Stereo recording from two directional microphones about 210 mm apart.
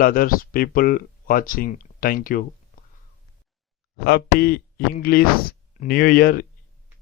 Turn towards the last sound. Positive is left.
turn(degrees=45)  # may be behind; listen again after turning